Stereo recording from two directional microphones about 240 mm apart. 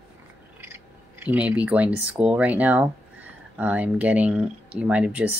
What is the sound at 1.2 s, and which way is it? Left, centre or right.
Speech, centre.